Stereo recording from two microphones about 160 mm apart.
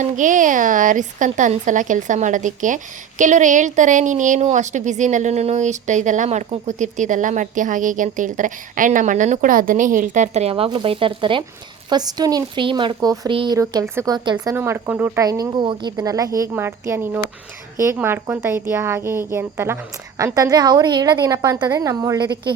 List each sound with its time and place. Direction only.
0.0 s a woman's voice: 55° right (ahead or behind); by 22.5 s 25° right (ahead or behind)